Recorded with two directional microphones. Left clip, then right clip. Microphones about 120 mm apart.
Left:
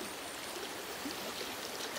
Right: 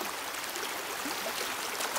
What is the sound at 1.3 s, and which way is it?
Stream, 25° right (ahead or behind).